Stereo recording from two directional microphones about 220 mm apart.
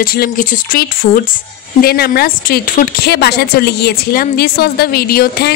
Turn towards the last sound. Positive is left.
turn(degrees=45)  # may be behind; listen again after turning